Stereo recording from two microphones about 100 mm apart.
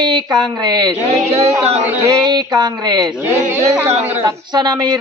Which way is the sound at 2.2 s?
45° right (ahead or behind).